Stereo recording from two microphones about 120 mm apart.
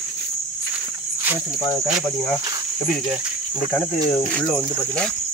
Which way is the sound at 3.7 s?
15° left (ahead or behind).